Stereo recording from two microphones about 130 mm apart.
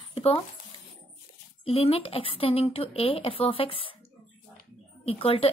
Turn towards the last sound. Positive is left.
turn(degrees=45)  # may be behind; listen again after turning